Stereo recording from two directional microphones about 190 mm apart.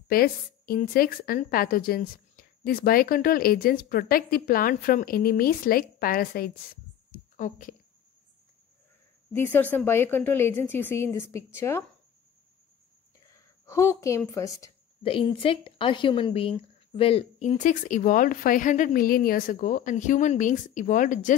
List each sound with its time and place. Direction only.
0.1 s a woman's voice: 50° left (ahead or behind)
7.1 s a sound: 45° left (ahead or behind)
9.3 s a woman's voice: 10° left (ahead or behind)
13.3 s speech: 15° left (ahead or behind)
15.0 s speech: 30° left (ahead or behind)